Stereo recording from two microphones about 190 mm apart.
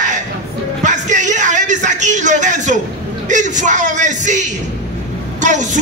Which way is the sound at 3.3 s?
40° right (ahead or behind).